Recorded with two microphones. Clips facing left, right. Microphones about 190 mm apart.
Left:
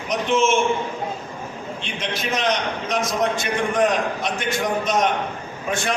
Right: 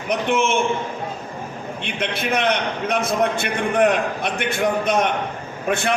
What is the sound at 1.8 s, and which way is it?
A man's voice, 60° right (ahead or behind).